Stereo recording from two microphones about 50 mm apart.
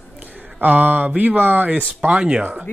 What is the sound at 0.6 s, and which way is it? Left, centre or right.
Speech, right.